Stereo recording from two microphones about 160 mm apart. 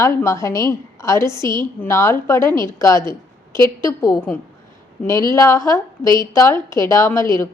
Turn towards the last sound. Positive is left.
turn(degrees=15)  # may be behind; listen again after turning